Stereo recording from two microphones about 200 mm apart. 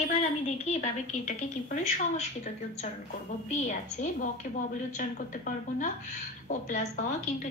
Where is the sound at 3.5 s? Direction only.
35° left (ahead or behind).